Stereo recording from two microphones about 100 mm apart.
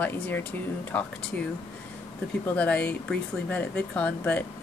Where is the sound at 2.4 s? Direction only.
15° left (ahead or behind).